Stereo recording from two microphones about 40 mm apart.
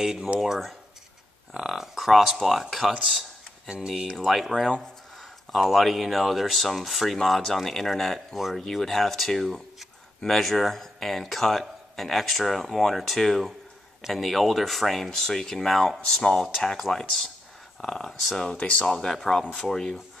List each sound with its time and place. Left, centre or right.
0.0 s speech: centre
0.4 s speech: centre
3.6 s speech: centre
5.5 s speech: centre
8.6 s speech: centre
15.0 s speech: centre
18.6 s speech: left
18.9 s speech: centre